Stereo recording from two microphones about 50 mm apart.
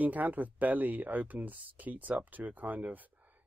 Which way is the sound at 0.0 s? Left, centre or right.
Right.